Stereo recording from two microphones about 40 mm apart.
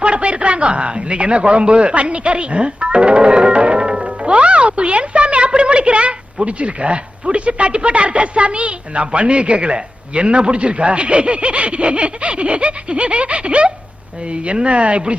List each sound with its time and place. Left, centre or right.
0.0 s speech: right